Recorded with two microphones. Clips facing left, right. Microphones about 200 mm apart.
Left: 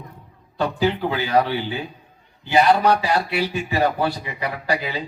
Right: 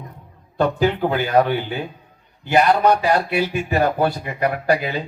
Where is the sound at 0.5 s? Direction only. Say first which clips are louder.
Right 3 dB; 55° right (ahead or behind).